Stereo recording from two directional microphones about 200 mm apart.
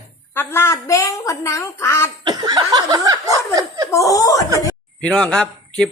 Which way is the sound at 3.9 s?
15° left (ahead or behind).